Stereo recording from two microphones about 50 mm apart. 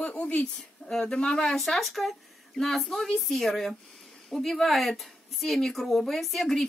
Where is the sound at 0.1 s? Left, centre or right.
Left.